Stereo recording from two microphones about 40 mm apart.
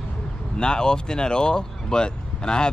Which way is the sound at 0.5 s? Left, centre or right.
Left.